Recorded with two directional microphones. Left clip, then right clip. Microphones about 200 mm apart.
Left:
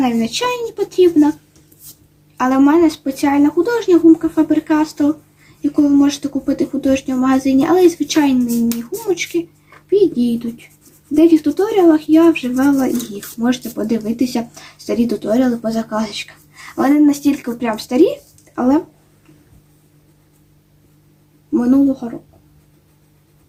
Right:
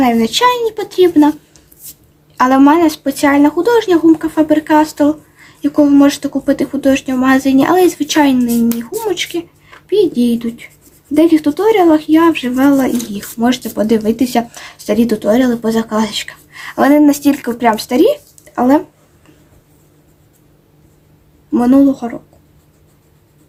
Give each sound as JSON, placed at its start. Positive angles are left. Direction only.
{"t": 0.0, "sound": "speech", "side_deg": -40}
{"t": 2.4, "sound": "speech", "side_deg": -35}
{"t": 21.5, "sound": "speech", "side_deg": -45}